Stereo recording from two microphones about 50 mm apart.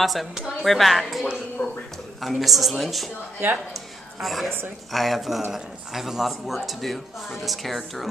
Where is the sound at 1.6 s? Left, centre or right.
Centre.